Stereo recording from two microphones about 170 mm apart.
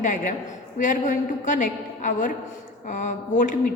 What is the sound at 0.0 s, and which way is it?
A woman's voice, 50° left (ahead or behind).